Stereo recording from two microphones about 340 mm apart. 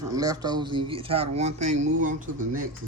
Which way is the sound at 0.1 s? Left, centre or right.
Centre.